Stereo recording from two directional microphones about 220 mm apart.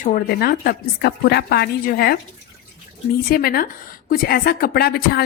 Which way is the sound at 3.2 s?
45° left (ahead or behind).